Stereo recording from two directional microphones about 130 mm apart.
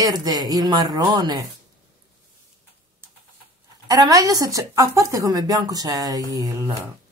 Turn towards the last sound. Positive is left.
turn(degrees=-25)  # may be behind; listen again after turning